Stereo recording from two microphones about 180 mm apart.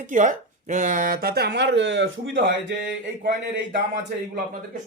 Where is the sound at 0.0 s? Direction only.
45° right (ahead or behind); by 2.6 s 80° right.